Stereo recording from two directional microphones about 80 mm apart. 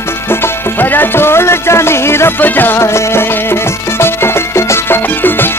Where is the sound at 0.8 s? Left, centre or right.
Left.